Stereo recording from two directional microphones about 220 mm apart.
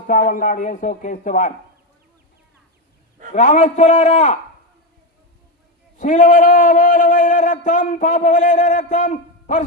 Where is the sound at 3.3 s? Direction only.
35° left (ahead or behind).